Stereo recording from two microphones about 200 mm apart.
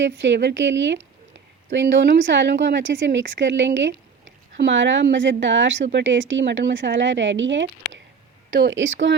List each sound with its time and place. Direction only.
0.0 s speech: 65° right (ahead or behind)